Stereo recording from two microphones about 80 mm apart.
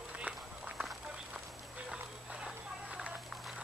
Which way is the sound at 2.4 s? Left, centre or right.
Centre.